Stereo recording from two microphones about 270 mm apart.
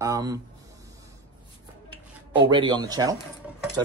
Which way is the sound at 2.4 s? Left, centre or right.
Centre.